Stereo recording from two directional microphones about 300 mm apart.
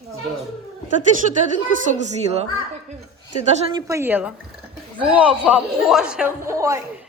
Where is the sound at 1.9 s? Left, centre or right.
Right.